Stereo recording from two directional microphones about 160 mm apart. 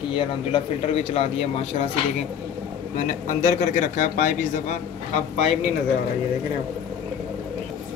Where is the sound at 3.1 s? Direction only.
50° left (ahead or behind).